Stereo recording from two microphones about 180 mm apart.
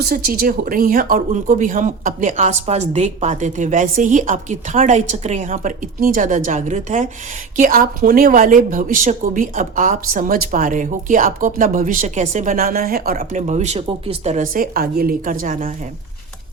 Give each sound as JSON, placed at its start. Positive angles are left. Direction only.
{"t": 0.0, "sound": "speech", "side_deg": -55}